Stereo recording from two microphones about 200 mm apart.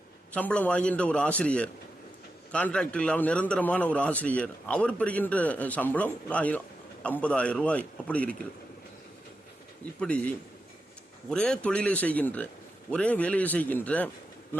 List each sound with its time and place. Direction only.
0.3 s a man's voice: 10° left (ahead or behind)
10.0 s a man's voice: 5° left (ahead or behind)